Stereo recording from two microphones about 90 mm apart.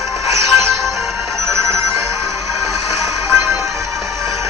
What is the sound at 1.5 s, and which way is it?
Music, 30° right (ahead or behind).